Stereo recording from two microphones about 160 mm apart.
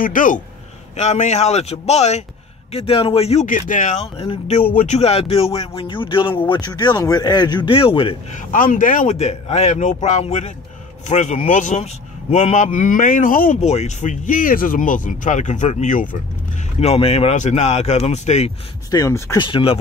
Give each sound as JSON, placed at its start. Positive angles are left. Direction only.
{"t": 0.0, "sound": "speech", "side_deg": 55}
{"t": 0.9, "sound": "speech", "side_deg": 45}
{"t": 3.4, "sound": "speech", "side_deg": 55}
{"t": 4.6, "sound": "speech", "side_deg": 50}
{"t": 8.3, "sound": "speech", "side_deg": 55}
{"t": 9.1, "sound": "speech", "side_deg": 40}
{"t": 13.6, "sound": "speech", "side_deg": 45}
{"t": 16.8, "sound": "speech", "side_deg": 40}
{"t": 18.9, "sound": "speech", "side_deg": 20}
{"t": 19.3, "sound": "speech", "side_deg": 30}